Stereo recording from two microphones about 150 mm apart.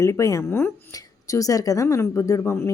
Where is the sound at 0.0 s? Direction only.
20° left (ahead or behind).